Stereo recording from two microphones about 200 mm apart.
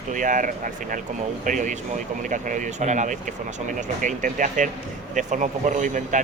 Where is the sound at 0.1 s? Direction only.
40° right (ahead or behind).